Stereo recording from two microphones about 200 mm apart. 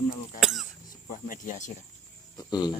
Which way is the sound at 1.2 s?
40° left (ahead or behind).